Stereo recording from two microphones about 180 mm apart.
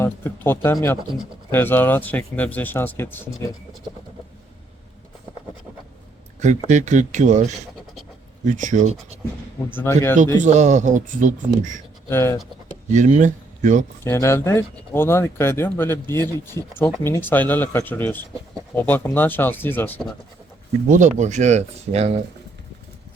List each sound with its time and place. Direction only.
0.0 s speech: 10° left (ahead or behind)
6.4 s speech: 40° right (ahead or behind)
9.7 s speech: 15° left (ahead or behind)
10.4 s speech: 40° right (ahead or behind)
12.0 s speech: 15° left (ahead or behind)
12.9 s speech: 45° right (ahead or behind)
14.0 s speech: 15° left (ahead or behind)
20.9 s speech: 40° right (ahead or behind)